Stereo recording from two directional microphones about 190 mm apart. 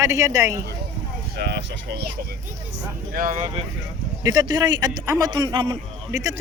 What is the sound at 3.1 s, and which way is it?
Speech, 40° right (ahead or behind).